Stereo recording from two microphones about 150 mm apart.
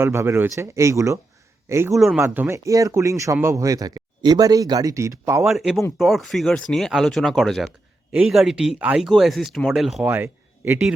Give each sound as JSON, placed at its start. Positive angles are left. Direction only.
{"t": 0.0, "sound": "speech", "side_deg": -15}
{"t": 1.9, "sound": "speech", "side_deg": 0}
{"t": 2.2, "sound": "speech", "side_deg": -15}
{"t": 5.5, "sound": "speech", "side_deg": 0}